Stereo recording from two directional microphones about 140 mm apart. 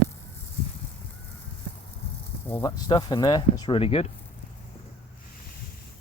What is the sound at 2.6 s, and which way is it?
Speech, 30° left (ahead or behind).